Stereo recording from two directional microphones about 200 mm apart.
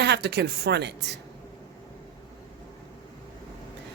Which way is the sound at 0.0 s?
55° right (ahead or behind).